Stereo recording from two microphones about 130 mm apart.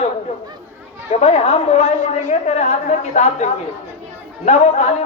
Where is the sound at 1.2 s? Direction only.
55° left (ahead or behind).